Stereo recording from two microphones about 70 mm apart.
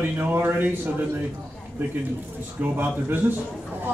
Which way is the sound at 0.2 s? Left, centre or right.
Right.